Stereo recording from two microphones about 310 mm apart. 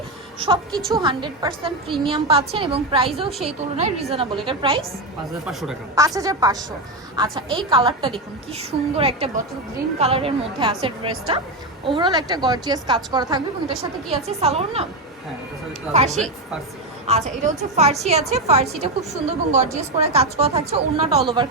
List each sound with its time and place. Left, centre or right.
0.3 s speech: centre
0.7 s a woman's voice: centre
0.9 s a woman's voice: centre
5.5 s a woman's voice: centre
15.9 s a woman's voice: right